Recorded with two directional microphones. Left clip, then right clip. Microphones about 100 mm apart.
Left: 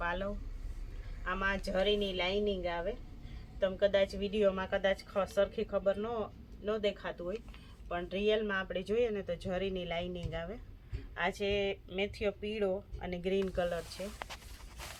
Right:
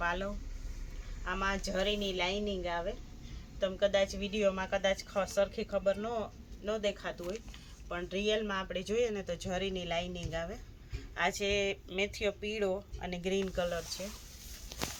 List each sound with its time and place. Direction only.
0.0 s speech: 15° left (ahead or behind)
11.1 s speech: 10° right (ahead or behind); by 13.8 s 15° left (ahead or behind)